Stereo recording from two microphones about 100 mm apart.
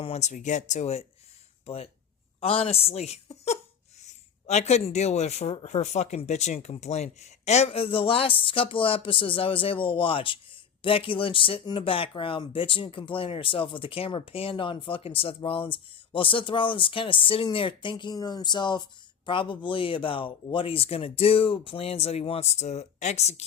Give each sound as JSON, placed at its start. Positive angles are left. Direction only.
{"t": 1.6, "sound": "a woman's voice", "side_deg": 75}